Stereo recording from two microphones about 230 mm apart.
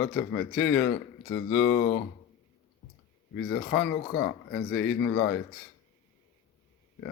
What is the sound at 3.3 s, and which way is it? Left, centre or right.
Speech, left.